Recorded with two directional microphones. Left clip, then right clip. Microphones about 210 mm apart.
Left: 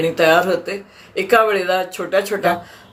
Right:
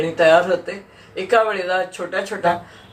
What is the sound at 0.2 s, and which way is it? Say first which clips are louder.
Speech: right 1 dB; 55° left (ahead or behind).